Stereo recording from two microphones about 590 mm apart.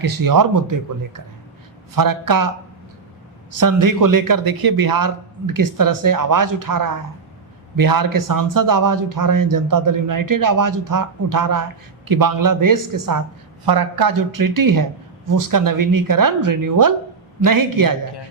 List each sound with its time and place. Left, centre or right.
0.0 s speech: right
3.6 s speech: right